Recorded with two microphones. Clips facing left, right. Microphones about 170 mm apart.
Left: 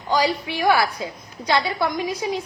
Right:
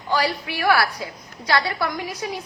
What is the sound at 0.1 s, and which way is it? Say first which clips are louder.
A woman's voice: left 2 dB; 20° left (ahead or behind).